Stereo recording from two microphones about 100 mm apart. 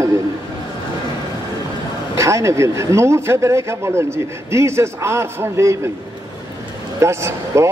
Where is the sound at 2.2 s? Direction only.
30° right (ahead or behind).